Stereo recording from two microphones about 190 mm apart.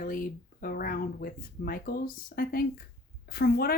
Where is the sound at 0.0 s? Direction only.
45° left (ahead or behind).